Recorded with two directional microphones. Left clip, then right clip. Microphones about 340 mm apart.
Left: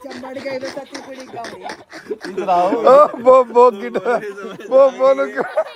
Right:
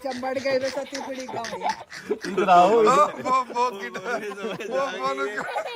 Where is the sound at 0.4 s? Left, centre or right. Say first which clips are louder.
Even; centre.